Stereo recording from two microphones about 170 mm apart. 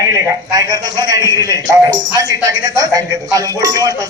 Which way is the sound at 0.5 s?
20° right (ahead or behind).